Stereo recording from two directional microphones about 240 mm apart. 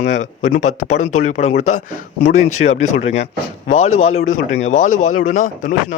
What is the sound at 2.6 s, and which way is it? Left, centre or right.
Speech, left.